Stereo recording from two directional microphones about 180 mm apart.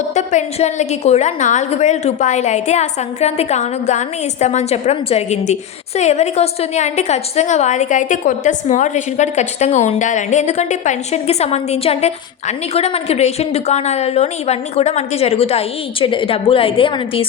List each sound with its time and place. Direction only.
0.1 s a woman's voice: 40° left (ahead or behind)